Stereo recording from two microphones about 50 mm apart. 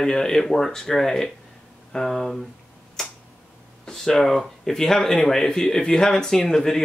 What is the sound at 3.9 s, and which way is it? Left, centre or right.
Speech, centre.